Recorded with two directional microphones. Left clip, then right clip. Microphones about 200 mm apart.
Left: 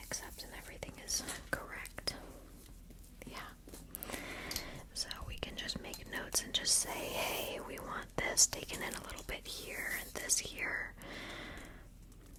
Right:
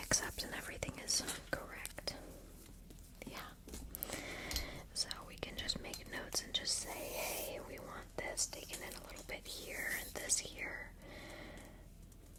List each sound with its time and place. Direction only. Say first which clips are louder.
0.0 s whispering: right 7 dB; 55° right (ahead or behind); by 1.0 s 35° right (ahead or behind)
1.5 s whispering: left 3 dB; 15° left (ahead or behind)
3.2 s whispering: left 1 dB; 10° left (ahead or behind); by 8.0 s 40° left (ahead or behind)
8.1 s whispering: left 9 dB; 60° left (ahead or behind); by 9.4 s 35° left (ahead or behind)
9.4 s whispering: right 1 dB; 20° left (ahead or behind)
10.7 s gasp: left 8 dB; 40° left (ahead or behind)